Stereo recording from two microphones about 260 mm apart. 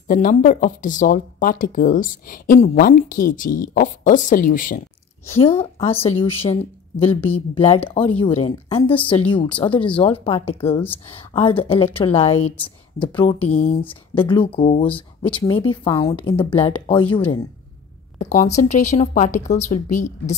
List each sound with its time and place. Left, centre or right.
0.1 s speech: left
7.1 s speech: centre
7.5 s speech: left
9.8 s speech: centre
10.0 s speech: left